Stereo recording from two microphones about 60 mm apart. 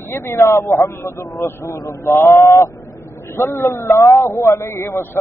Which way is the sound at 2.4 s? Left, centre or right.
Left.